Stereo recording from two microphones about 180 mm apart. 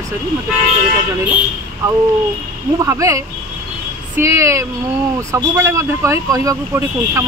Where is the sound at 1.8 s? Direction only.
15° right (ahead or behind).